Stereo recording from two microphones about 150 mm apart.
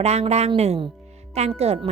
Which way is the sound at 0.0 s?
45° right (ahead or behind).